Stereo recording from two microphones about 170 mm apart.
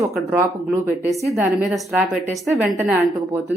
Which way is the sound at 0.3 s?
15° right (ahead or behind).